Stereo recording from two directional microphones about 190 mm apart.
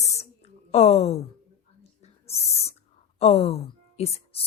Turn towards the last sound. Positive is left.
turn(degrees=30)  # may be behind; listen again after turning